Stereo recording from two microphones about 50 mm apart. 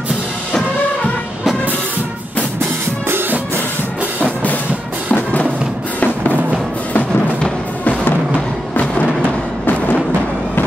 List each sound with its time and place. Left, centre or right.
3.1 s music: right
5.1 s music: left
8.7 s music: left